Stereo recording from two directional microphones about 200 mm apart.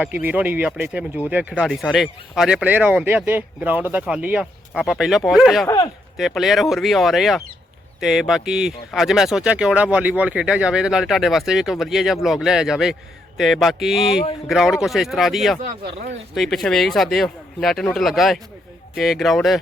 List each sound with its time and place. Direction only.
0.0 s speech: 10° right (ahead or behind)
5.6 s speech: 20° left (ahead or behind)
6.1 s speech: centre (ahead or behind)